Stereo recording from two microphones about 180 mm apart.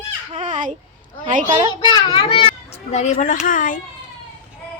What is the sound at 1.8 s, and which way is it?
A child's voice, 25° left (ahead or behind).